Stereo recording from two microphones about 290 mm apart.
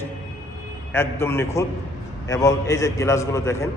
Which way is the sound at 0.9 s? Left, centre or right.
Centre.